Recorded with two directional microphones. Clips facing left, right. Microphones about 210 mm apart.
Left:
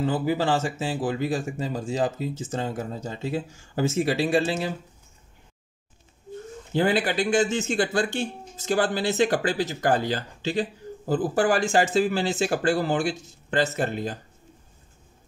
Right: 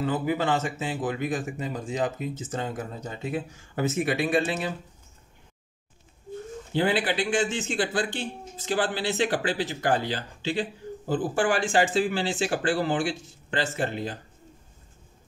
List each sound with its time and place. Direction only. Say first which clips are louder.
0.0 s speech: left 2 dB; 30° left (ahead or behind)
6.7 s speech: left 2 dB; 45° left (ahead or behind)